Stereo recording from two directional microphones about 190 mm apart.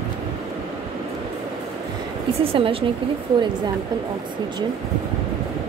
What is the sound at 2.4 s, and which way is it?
Speech, 30° right (ahead or behind).